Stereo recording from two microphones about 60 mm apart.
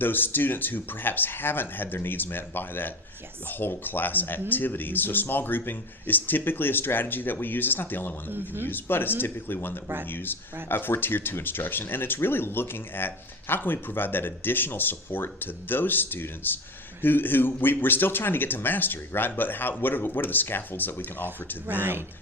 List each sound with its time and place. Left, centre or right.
0.0 s speech: left
8.3 s speech: right
8.6 s speech: left
9.8 s speech: right
10.1 s speech: left
21.7 s speech: right